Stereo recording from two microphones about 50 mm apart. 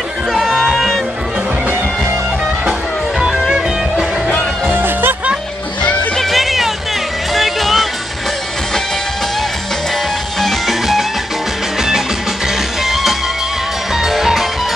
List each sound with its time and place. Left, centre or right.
0.3 s music: centre
3.2 s music: centre
4.7 s music: right
6.1 s music: centre
10.4 s music: centre
12.8 s music: centre